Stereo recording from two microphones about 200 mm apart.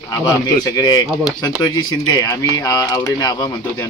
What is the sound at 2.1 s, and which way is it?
Speech, 15° left (ahead or behind).